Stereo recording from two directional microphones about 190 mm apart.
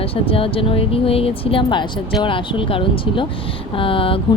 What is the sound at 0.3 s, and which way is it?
Speech, 30° left (ahead or behind).